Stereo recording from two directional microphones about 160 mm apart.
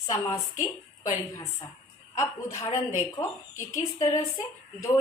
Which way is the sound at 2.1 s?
20° left (ahead or behind).